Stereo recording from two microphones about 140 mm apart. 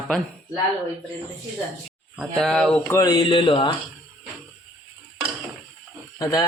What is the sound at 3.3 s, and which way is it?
Speech, 35° left (ahead or behind).